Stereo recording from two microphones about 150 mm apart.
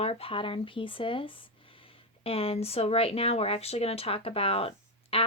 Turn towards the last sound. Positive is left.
turn(degrees=40)  # may be behind; listen again after turning